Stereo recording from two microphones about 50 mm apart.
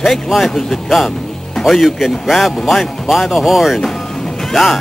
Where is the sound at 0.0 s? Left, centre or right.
Centre.